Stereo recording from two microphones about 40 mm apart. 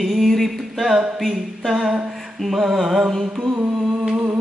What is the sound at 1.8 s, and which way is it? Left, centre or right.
Mantra, right.